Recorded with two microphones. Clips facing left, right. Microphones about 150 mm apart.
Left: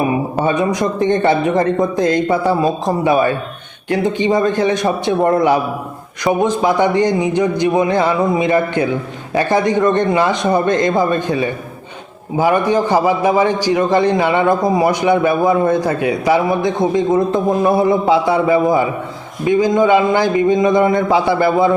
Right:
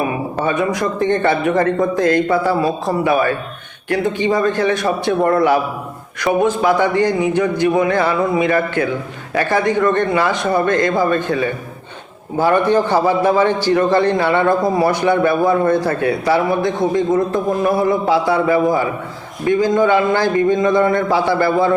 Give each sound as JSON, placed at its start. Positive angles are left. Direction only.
{"t": 0.4, "sound": "a man's voice", "side_deg": 20}